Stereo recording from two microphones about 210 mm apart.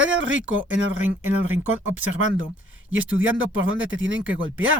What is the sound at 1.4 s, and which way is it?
Speech, 90° right.